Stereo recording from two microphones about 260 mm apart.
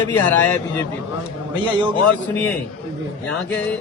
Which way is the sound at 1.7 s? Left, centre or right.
Centre.